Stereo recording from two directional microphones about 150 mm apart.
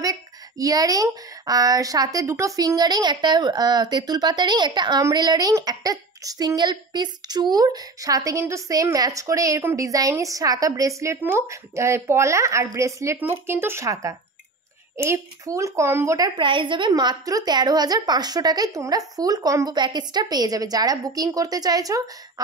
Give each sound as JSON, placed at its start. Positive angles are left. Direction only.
{"t": 0.0, "sound": "speech", "side_deg": -25}
{"t": 16.3, "sound": "speech", "side_deg": -35}